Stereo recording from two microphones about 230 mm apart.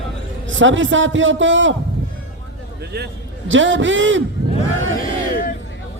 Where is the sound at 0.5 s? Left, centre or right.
Right.